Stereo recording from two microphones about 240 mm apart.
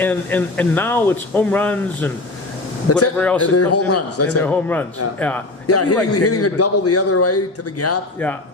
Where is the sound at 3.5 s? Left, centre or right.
Left.